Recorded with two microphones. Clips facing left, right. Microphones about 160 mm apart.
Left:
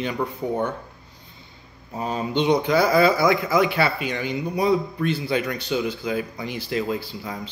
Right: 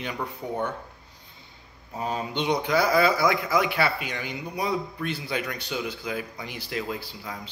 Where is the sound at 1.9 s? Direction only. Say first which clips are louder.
Left 5 dB; 30° left (ahead or behind).